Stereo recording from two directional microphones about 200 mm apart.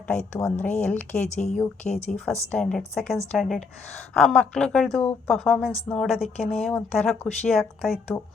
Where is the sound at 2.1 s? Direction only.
5° left (ahead or behind).